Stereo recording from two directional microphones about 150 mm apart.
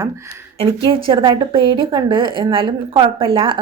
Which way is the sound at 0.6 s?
35° right (ahead or behind).